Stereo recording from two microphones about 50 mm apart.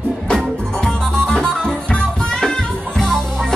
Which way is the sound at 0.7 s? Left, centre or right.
Centre.